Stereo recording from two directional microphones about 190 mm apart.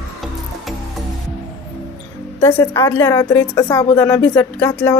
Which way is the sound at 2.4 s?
15° left (ahead or behind).